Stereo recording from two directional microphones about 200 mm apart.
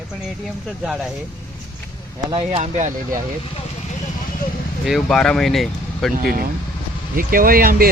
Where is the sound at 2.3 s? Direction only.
30° right (ahead or behind).